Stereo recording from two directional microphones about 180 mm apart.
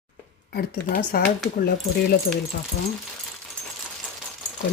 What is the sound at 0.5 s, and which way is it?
Speech, 55° left (ahead or behind).